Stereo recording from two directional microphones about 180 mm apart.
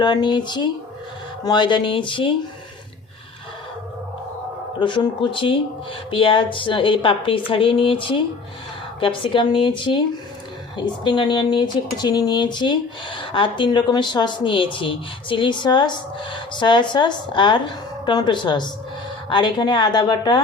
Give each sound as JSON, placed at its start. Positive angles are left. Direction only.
{"t": 0.0, "sound": "speech", "side_deg": 25}
{"t": 4.8, "sound": "speech", "side_deg": 25}
{"t": 11.0, "sound": "speech", "side_deg": 25}